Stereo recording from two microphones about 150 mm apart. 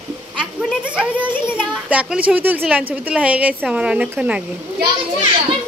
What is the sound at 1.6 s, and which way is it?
A child's voice, 5° right (ahead or behind).